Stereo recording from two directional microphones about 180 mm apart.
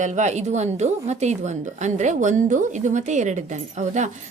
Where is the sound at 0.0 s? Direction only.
40° right (ahead or behind).